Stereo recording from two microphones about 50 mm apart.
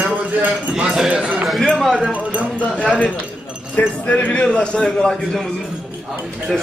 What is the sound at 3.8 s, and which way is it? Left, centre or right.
A man's voice, left.